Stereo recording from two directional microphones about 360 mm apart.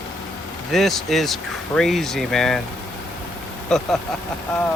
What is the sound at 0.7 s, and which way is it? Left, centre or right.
Speech, centre.